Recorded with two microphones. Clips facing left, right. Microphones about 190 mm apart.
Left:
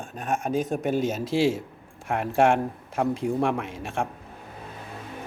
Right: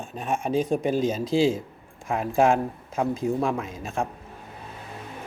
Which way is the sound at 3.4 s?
80° left.